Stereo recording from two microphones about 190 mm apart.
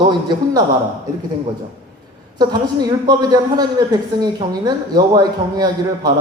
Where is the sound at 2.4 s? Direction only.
20° right (ahead or behind).